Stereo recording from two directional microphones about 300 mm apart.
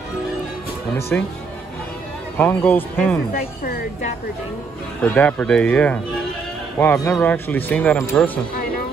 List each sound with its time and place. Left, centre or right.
0.9 s speech: centre
2.3 s speech: centre
3.6 s speech: left
5.0 s speech: centre